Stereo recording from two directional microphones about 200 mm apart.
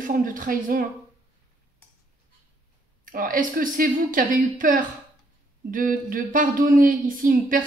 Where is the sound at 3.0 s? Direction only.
45° right (ahead or behind).